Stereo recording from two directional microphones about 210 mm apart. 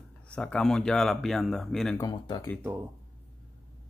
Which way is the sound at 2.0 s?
20° left (ahead or behind).